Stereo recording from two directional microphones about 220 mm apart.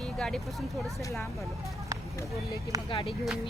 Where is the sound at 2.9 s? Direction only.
25° left (ahead or behind).